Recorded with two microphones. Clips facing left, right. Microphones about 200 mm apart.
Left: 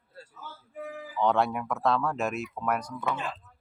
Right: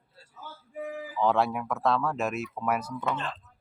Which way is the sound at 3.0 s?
10° left (ahead or behind).